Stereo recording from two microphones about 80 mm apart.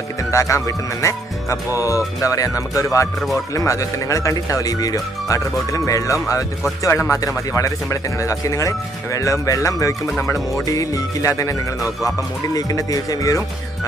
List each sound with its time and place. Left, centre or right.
0.3 s speech: left
12.5 s speech: left